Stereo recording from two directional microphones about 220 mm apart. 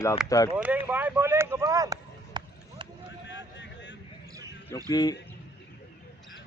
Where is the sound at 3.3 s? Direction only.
55° left (ahead or behind).